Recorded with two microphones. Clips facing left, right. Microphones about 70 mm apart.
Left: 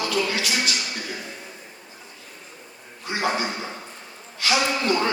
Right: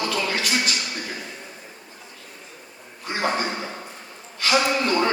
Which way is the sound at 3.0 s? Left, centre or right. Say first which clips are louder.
Even; right.